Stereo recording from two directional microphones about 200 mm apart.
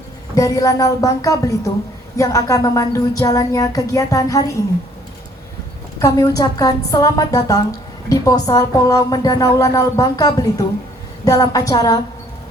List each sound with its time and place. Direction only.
0.3 s a woman's voice: 15° left (ahead or behind)
6.0 s a woman's voice: 15° left (ahead or behind)